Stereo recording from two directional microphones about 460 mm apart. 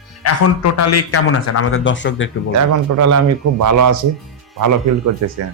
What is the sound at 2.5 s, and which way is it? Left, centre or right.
A man's voice, right.